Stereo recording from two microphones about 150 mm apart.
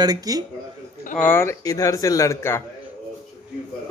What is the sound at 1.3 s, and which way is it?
Speech, 15° left (ahead or behind).